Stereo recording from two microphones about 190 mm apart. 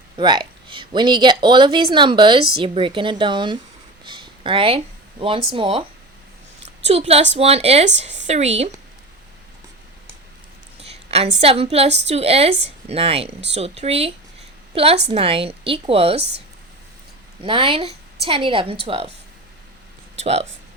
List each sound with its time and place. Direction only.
0.2 s speech: 25° right (ahead or behind)
4.0 s a sound: 25° right (ahead or behind)
5.5 s speech: 25° right (ahead or behind)
6.8 s a woman's voice: 35° right (ahead or behind)
10.8 s a woman's voice: 35° right (ahead or behind)
17.4 s speech: 30° right (ahead or behind)